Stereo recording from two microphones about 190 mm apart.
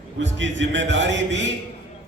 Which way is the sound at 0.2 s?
70° right (ahead or behind).